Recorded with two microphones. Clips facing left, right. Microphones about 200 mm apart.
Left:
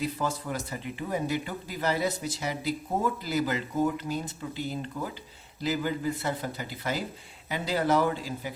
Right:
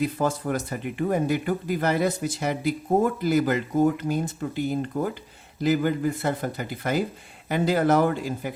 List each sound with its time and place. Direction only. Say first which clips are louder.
0.0 s speech: right 6 dB; 55° right (ahead or behind)